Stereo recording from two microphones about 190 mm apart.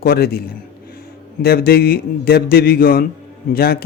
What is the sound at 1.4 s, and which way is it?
A man's voice, 55° left (ahead or behind).